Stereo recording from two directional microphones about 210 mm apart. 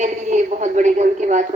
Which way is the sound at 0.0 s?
35° right (ahead or behind).